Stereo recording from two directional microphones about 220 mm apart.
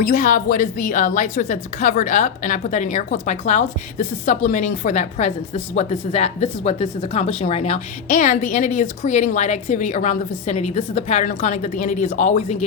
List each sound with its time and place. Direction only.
0.0 s a woman's voice: 35° left (ahead or behind)